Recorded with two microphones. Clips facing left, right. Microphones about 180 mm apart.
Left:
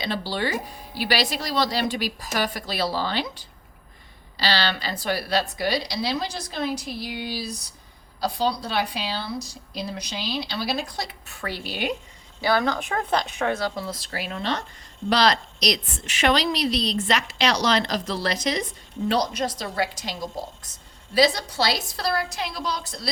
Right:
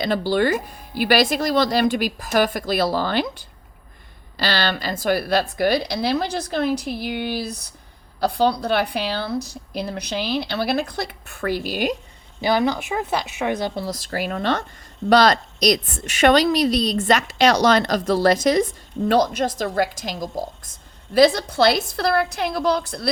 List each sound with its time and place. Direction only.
0.0 s a woman's voice: 50° right (ahead or behind)
12.4 s speech: 15° right (ahead or behind)
13.7 s a woman's voice: 40° right (ahead or behind); by 23.0 s 60° right (ahead or behind)